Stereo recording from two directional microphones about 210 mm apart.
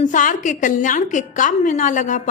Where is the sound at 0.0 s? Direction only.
40° left (ahead or behind).